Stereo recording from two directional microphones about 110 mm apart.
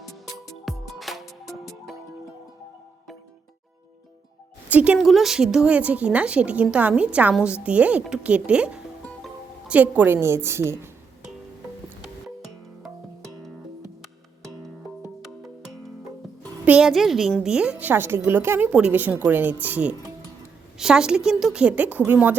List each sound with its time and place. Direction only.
0.6 s music: centre (ahead or behind)
4.7 s speech: 10° right (ahead or behind)
4.9 s a woman's voice: centre (ahead or behind); by 10.8 s 25° right (ahead or behind)
12.8 s music: centre (ahead or behind)
16.6 s a woman's voice: 5° right (ahead or behind)